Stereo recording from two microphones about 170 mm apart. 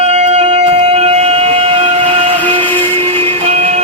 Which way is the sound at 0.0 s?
40° right (ahead or behind).